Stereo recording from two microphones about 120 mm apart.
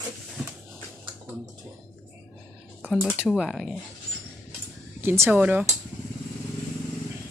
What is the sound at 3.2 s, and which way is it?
Speech, centre (ahead or behind).